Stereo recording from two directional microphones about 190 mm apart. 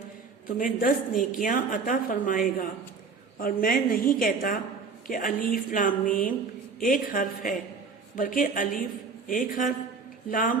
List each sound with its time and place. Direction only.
0.4 s a woman's voice: 45° left (ahead or behind)
3.4 s a woman's voice: 50° left (ahead or behind)